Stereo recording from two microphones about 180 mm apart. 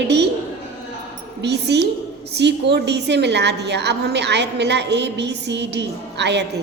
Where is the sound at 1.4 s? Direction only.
70° right (ahead or behind).